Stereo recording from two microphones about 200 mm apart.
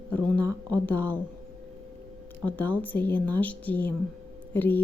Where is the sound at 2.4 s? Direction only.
10° left (ahead or behind).